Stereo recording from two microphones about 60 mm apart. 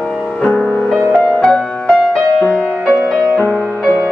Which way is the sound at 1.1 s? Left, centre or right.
Centre.